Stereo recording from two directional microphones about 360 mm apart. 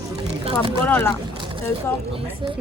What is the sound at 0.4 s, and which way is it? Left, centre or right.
Speech, centre.